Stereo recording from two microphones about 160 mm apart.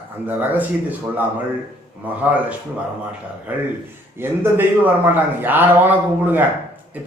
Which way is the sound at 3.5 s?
10° right (ahead or behind).